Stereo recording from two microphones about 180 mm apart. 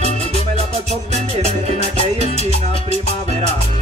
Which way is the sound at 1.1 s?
35° right (ahead or behind).